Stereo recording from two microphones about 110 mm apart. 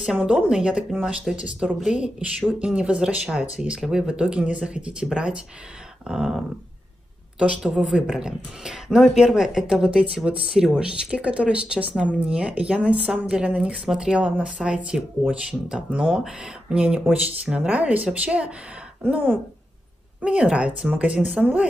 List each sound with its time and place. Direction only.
0.0 s speech: 10° right (ahead or behind)
6.0 s a sound: 5° right (ahead or behind)
7.3 s speech: 10° right (ahead or behind)